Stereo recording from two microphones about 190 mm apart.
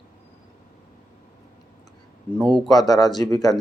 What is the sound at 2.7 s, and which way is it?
Speech, 20° left (ahead or behind).